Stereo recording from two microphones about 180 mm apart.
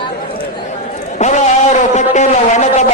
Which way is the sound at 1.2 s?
40° left (ahead or behind).